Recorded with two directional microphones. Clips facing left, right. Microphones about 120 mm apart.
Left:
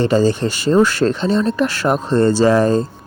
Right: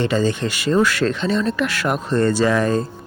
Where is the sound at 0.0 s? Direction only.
35° left (ahead or behind).